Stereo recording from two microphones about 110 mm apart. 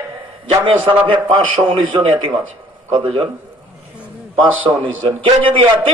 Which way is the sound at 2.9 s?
55° right (ahead or behind).